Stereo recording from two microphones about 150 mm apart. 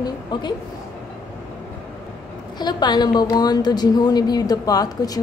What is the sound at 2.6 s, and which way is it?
A woman's voice, 30° left (ahead or behind).